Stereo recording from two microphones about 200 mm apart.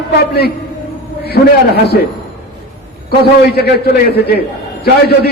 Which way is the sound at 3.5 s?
50° left (ahead or behind).